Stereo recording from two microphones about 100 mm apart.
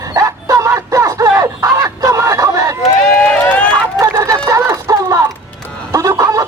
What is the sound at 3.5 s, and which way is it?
Run, 10° left (ahead or behind).